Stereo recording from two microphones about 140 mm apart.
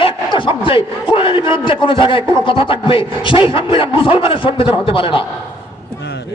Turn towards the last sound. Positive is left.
turn(degrees=40)  # may be behind; listen again after turning